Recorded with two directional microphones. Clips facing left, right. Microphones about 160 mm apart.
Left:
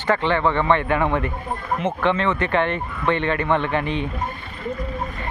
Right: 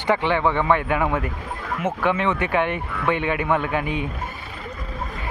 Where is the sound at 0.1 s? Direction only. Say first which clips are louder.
Even; 10° right (ahead or behind).